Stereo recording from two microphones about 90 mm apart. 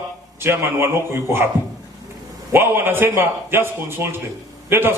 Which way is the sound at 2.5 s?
25° right (ahead or behind).